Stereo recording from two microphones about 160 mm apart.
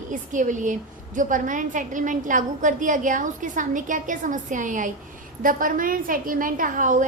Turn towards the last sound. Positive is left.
turn(degrees=-55)  # may be behind; listen again after turning